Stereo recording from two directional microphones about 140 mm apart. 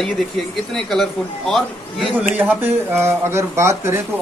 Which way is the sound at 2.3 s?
15° right (ahead or behind).